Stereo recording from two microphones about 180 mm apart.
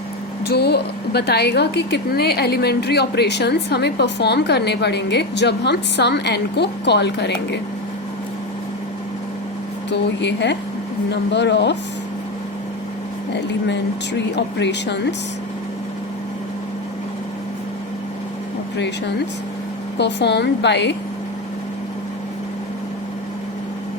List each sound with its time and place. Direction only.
0.4 s a woman's voice: 65° left (ahead or behind)
9.9 s a woman's voice: 75° left (ahead or behind)
13.3 s a woman's voice: 75° left (ahead or behind)
20.0 s a woman's voice: 70° left (ahead or behind)